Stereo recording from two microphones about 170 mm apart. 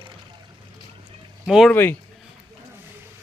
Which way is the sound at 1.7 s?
10° left (ahead or behind).